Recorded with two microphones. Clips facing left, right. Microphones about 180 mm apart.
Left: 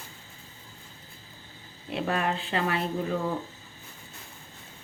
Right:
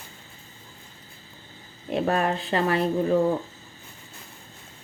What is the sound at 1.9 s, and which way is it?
Speech, 45° right (ahead or behind).